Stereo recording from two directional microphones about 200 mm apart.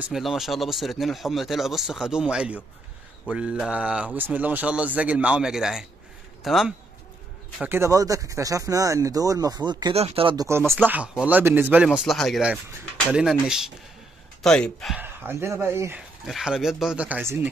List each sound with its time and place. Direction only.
0.0 s speech: centre (ahead or behind); by 10.6 s 20° right (ahead or behind)
10.8 s speech: 5° right (ahead or behind)
15.0 s speech: 10° right (ahead or behind)
16.3 s speech: centre (ahead or behind)